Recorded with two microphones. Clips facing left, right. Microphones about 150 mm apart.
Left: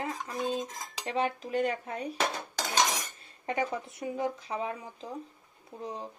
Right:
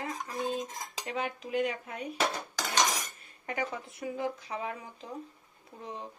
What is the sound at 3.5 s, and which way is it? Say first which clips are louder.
Speech: left 4 dB; 25° left (ahead or behind).